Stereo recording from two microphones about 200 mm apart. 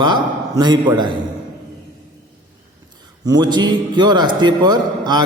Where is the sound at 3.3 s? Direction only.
20° right (ahead or behind).